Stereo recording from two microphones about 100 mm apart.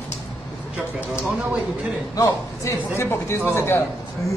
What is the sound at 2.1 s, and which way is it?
Speech, 35° left (ahead or behind).